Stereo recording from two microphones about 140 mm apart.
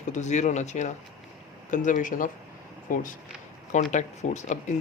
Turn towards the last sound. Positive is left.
turn(degrees=55)  # may be behind; listen again after turning